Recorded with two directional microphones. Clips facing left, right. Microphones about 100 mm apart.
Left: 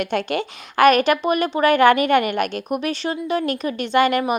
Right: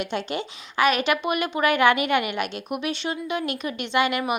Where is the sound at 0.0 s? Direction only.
55° left (ahead or behind).